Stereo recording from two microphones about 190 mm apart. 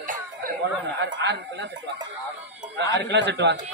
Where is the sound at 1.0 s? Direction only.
65° right (ahead or behind).